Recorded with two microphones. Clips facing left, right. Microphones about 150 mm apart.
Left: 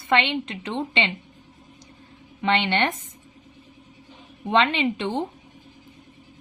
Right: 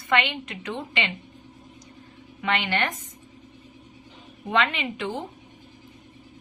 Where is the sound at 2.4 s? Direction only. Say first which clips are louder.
Left 4 dB; 25° left (ahead or behind).